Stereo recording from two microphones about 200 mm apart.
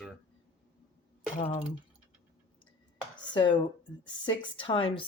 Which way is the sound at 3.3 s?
25° left (ahead or behind).